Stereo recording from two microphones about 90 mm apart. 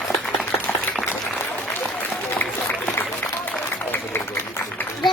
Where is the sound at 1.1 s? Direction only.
20° left (ahead or behind).